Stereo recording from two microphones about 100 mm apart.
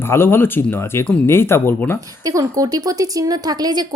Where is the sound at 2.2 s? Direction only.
35° right (ahead or behind).